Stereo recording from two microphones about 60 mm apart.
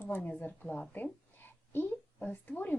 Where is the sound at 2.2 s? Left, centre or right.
Left.